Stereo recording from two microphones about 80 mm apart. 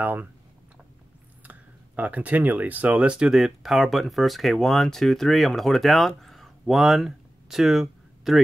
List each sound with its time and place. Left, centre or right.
0.0 s speech: right
1.4 s speech: centre